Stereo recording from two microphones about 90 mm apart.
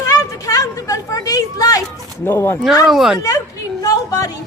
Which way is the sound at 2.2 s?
25° left (ahead or behind).